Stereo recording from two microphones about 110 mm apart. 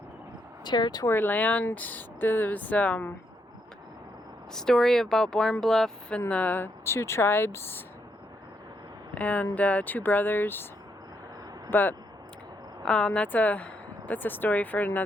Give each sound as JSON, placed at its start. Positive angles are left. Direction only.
{"t": 0.6, "sound": "speech", "side_deg": 40}
{"t": 1.0, "sound": "speech", "side_deg": 20}
{"t": 4.5, "sound": "speech", "side_deg": 5}
{"t": 9.1, "sound": "speech", "side_deg": 15}
{"t": 11.7, "sound": "speech", "side_deg": 20}